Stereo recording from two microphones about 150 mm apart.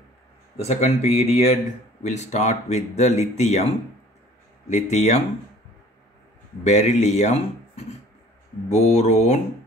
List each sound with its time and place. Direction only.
0.6 s speech: 45° left (ahead or behind)
4.6 s speech: 50° left (ahead or behind)
6.6 s speech: 50° left (ahead or behind)